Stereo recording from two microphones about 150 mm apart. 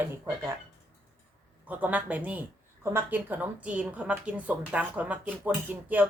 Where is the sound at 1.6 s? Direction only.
10° right (ahead or behind).